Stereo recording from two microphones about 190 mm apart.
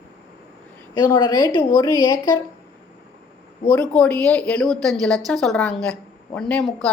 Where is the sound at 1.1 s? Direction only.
20° left (ahead or behind).